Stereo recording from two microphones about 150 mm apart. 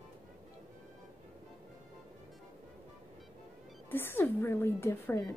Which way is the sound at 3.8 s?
15° left (ahead or behind).